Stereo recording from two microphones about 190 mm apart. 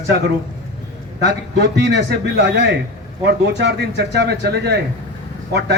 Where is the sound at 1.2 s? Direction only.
65° right (ahead or behind).